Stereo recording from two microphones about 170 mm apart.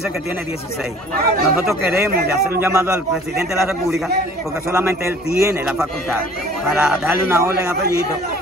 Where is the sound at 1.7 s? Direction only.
15° right (ahead or behind).